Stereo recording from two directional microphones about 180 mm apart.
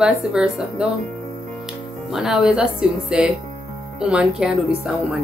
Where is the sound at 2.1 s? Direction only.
5° right (ahead or behind).